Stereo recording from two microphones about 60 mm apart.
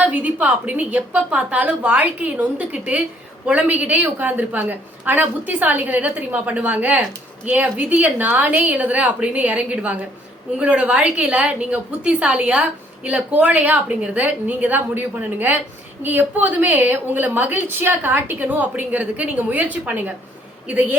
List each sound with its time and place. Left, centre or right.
0.0 s a woman's voice: right